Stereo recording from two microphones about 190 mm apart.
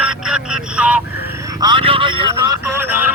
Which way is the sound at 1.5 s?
25° right (ahead or behind).